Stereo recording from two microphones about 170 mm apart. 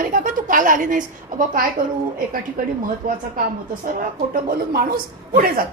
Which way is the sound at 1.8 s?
55° right (ahead or behind).